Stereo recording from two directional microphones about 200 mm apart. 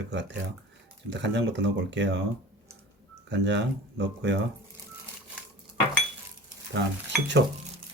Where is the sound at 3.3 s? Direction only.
60° right (ahead or behind).